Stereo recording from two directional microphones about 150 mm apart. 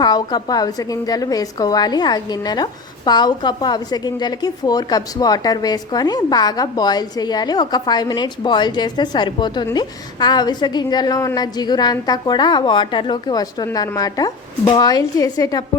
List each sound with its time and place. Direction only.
0.0 s a woman's voice: 30° left (ahead or behind)